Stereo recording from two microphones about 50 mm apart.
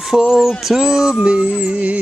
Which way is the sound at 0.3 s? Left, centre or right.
Centre.